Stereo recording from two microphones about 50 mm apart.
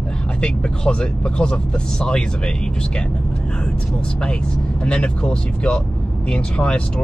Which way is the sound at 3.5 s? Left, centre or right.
Centre.